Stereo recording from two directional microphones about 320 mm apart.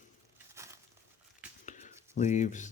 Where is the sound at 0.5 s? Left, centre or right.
Centre.